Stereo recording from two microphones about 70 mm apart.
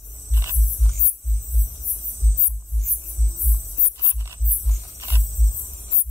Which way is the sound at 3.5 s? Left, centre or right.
Right.